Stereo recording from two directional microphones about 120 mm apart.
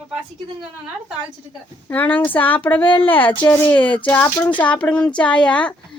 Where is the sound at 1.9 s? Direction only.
15° left (ahead or behind).